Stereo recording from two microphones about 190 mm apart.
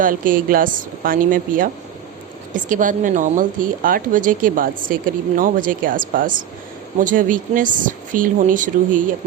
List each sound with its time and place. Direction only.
0.0 s a woman's voice: 45° right (ahead or behind)